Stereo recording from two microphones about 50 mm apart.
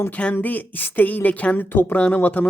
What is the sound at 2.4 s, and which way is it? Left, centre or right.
Speech, left.